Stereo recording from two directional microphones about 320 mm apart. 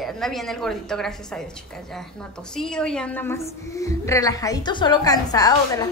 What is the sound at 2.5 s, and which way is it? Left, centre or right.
A woman's voice, centre.